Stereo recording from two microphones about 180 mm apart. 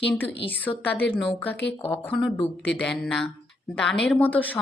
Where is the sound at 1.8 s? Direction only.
10° left (ahead or behind).